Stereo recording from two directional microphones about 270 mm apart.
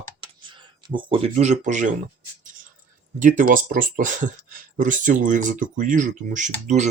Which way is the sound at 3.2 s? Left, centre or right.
Right.